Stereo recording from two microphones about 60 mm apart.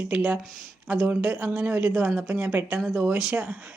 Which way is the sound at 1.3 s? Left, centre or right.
Right.